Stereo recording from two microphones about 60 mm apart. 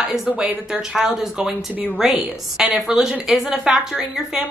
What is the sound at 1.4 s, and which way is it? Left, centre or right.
Speech, right.